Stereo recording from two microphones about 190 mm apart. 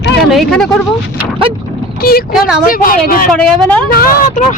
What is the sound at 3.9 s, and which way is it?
Speech, 50° left (ahead or behind).